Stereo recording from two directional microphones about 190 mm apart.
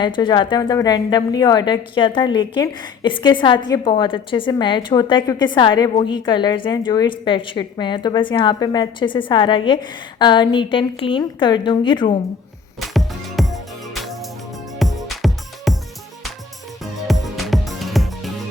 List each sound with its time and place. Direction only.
0.0 s a woman's voice: 25° left (ahead or behind)
12.8 s music: centre (ahead or behind)
16.8 s music: centre (ahead or behind)